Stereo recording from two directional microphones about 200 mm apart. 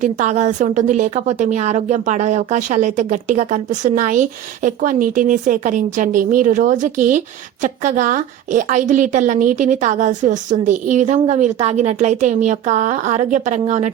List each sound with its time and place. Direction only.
0.0 s a woman's voice: 35° right (ahead or behind)